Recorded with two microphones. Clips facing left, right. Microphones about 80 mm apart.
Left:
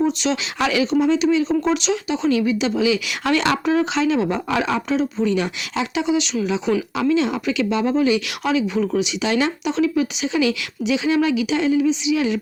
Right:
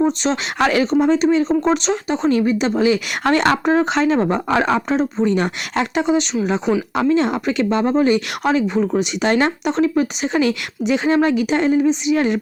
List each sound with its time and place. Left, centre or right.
0.0 s speech: right